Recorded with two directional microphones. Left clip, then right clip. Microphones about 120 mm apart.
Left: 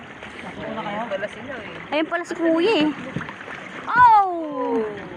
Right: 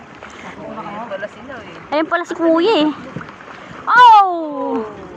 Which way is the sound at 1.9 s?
Centre (ahead or behind).